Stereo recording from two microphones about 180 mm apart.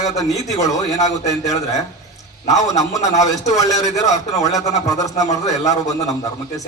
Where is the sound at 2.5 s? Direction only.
20° left (ahead or behind).